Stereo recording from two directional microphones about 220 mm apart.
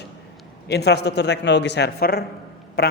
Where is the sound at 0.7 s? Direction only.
50° left (ahead or behind).